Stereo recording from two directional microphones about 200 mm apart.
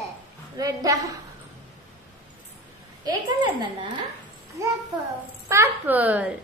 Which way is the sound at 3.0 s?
20° right (ahead or behind).